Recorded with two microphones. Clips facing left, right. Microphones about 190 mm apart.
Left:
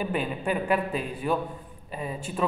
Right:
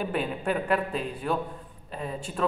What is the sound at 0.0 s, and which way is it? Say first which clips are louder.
A man's voice: even; 5° left (ahead or behind).